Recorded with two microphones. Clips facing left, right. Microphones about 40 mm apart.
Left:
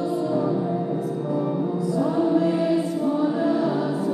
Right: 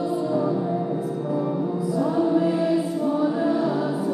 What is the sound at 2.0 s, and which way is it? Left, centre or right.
Music, centre.